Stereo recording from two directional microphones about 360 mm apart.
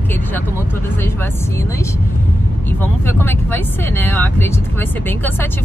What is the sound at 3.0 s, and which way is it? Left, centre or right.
Speech, centre.